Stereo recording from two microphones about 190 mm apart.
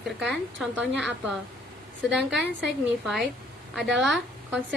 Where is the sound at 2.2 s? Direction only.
65° right (ahead or behind).